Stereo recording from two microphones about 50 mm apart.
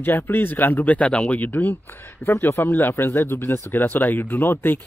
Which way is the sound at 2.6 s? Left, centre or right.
Left.